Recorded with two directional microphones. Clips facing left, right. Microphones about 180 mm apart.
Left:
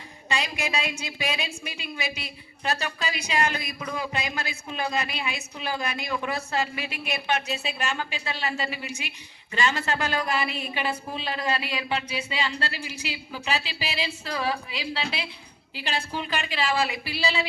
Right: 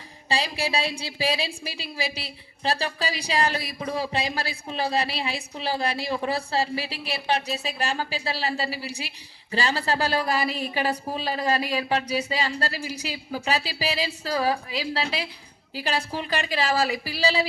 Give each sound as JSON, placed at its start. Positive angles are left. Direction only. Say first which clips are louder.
{"t": 0.3, "sound": "a woman's voice", "louder": "right 3 dB", "side_deg": -30}